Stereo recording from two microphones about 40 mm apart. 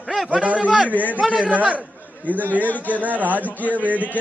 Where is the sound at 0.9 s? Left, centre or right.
Right.